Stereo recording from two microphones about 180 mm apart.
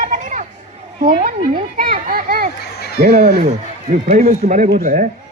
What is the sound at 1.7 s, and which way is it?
A man's voice, 55° right (ahead or behind).